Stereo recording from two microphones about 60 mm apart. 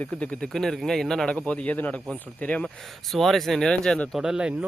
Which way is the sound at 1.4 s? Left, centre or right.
Left.